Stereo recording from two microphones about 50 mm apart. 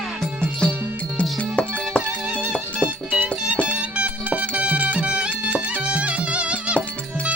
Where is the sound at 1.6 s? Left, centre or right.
Left.